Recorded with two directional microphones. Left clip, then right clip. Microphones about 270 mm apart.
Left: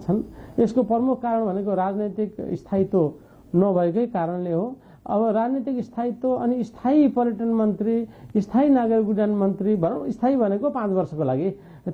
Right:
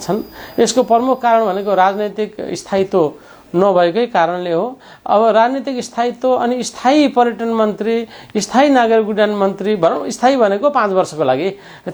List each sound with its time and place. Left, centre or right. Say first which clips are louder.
0.5 s speech: right 9 dB; centre
4.5 s speech: right 9 dB; right
5.1 s speech: right 11 dB; centre